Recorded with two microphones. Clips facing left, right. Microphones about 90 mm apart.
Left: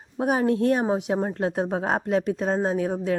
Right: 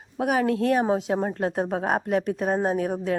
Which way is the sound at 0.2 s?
30° left (ahead or behind).